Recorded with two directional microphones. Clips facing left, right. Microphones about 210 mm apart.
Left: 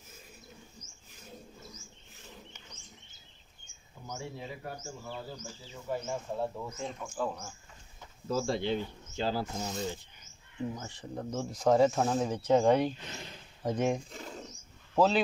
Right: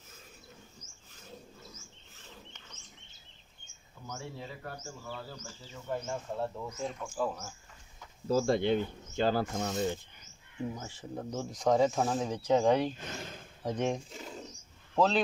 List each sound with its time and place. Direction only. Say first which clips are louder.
4.1 s a man's voice: left 2 dB; 15° left (ahead or behind)
8.5 s speech: right 4 dB; 55° right (ahead or behind)
10.6 s speech: left 1 dB; 5° right (ahead or behind)
13.0 s a sound: right 3 dB; 50° right (ahead or behind)
13.7 s a man's voice: left 2 dB; 5° left (ahead or behind)
14.1 s pigeon: even; 5° right (ahead or behind)
15.0 s a man's voice: left 1 dB; 5° left (ahead or behind)